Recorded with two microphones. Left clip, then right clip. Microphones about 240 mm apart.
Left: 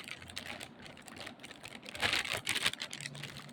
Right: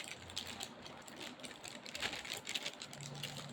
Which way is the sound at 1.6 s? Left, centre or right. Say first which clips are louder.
Left 7 dB; left.